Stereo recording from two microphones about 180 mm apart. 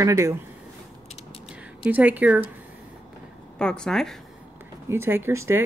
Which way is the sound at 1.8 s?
10° right (ahead or behind).